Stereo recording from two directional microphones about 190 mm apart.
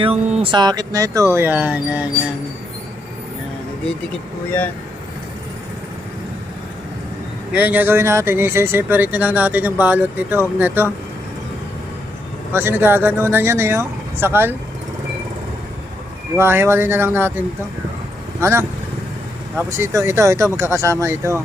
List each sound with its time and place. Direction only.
0.0 s speech: 30° right (ahead or behind); by 2.0 s 10° right (ahead or behind)
7.5 s speech: 10° right (ahead or behind)
12.5 s speech: 10° right (ahead or behind)
16.4 s speech: 15° right (ahead or behind)